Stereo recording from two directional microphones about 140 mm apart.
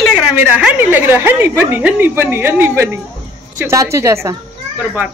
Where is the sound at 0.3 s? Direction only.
10° right (ahead or behind).